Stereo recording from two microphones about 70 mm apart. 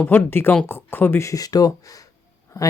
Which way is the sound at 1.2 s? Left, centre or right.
Left.